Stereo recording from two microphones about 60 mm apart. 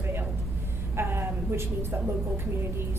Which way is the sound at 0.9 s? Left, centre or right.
Right.